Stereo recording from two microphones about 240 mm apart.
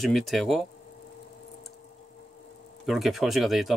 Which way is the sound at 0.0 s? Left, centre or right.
Centre.